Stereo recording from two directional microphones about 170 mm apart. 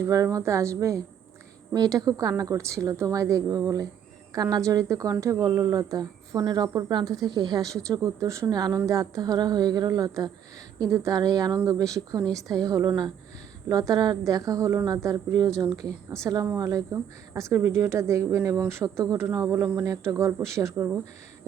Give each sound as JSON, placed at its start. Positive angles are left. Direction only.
{"t": 0.0, "sound": "a woman's voice", "side_deg": -20}